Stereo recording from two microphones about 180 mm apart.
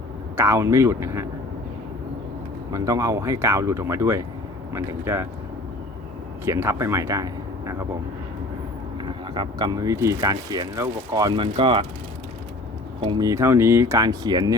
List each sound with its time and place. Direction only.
0.3 s speech: 15° right (ahead or behind)
2.7 s speech: 20° right (ahead or behind)
6.4 s speech: 15° right (ahead or behind)
9.0 s speech: 25° right (ahead or behind)
13.0 s speech: 25° right (ahead or behind)